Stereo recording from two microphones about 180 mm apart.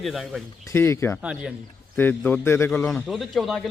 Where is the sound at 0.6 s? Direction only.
15° left (ahead or behind).